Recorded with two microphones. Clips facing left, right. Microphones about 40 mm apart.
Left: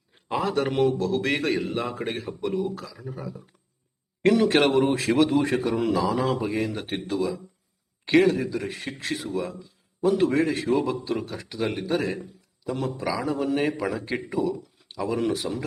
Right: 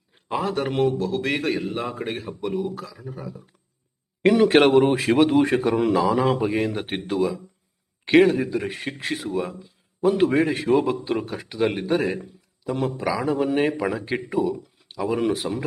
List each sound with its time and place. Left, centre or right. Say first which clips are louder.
0.3 s a man's voice: even; centre
4.2 s a man's voice: right 4 dB; centre